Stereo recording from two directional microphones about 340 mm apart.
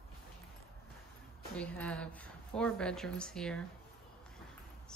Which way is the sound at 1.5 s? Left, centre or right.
Centre.